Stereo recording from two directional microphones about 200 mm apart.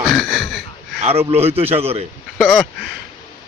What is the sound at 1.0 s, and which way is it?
A man's voice, 30° right (ahead or behind).